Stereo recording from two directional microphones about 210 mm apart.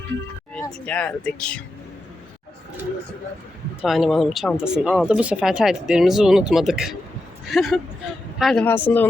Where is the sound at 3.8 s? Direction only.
Centre (ahead or behind).